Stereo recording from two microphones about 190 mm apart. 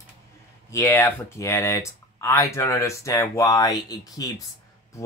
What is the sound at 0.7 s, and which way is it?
Speech, 15° left (ahead or behind).